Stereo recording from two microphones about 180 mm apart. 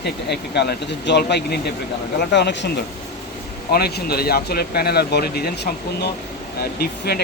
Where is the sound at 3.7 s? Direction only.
60° left (ahead or behind).